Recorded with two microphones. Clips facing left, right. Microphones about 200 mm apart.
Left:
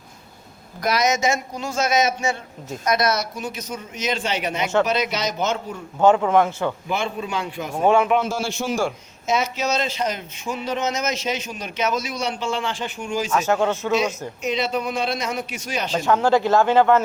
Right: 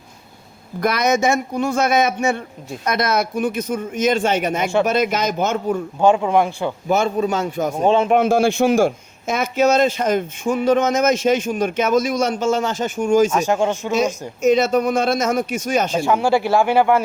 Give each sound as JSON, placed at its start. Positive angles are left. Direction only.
{"t": 0.8, "sound": "a man's voice", "side_deg": -55}
{"t": 6.0, "sound": "speech", "side_deg": -15}
{"t": 6.8, "sound": "speech", "side_deg": -40}
{"t": 7.8, "sound": "a man's voice", "side_deg": -20}
{"t": 8.1, "sound": "speech", "side_deg": -55}
{"t": 13.3, "sound": "speech", "side_deg": -15}
{"t": 13.9, "sound": "speech", "side_deg": -45}
{"t": 16.0, "sound": "speech", "side_deg": -10}